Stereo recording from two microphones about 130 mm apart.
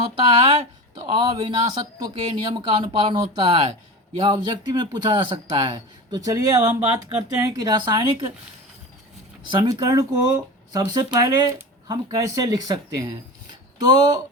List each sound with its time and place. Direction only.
0.9 s speech: 40° right (ahead or behind)
9.5 s speech: 40° right (ahead or behind)